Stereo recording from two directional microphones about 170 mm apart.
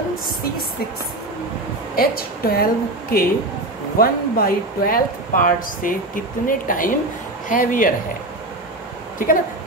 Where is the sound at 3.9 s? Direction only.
60° left (ahead or behind).